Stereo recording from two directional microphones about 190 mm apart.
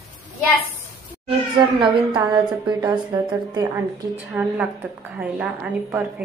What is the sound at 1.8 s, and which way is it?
A woman's voice, 25° right (ahead or behind).